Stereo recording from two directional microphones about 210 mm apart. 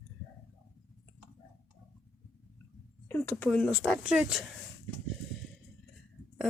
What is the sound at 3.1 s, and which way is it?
Speech, 10° left (ahead or behind).